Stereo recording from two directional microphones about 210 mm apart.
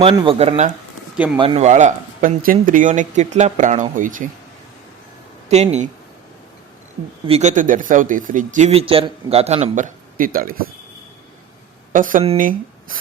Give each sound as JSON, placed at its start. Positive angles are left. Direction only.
{"t": 0.0, "sound": "speech", "side_deg": -25}
{"t": 5.5, "sound": "speech", "side_deg": -30}
{"t": 7.3, "sound": "speech", "side_deg": -30}
{"t": 11.9, "sound": "speech", "side_deg": -40}